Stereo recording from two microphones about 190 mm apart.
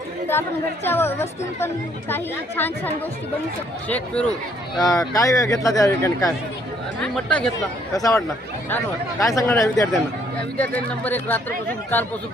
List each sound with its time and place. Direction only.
0.9 s speech: 10° left (ahead or behind)
4.9 s speech: 20° left (ahead or behind)
7.0 s speech: 5° left (ahead or behind)
7.9 s speech: 20° left (ahead or behind)